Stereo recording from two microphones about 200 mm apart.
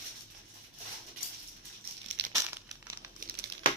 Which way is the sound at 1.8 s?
50° right (ahead or behind).